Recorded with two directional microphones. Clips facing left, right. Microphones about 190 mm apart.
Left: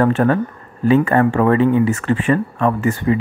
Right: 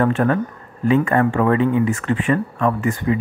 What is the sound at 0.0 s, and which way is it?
Speech, 40° left (ahead or behind).